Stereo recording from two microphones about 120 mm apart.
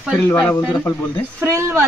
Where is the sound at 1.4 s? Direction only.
20° right (ahead or behind).